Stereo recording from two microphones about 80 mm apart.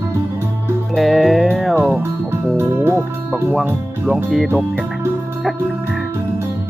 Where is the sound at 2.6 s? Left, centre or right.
Right.